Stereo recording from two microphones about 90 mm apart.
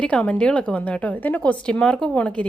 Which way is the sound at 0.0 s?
15° left (ahead or behind).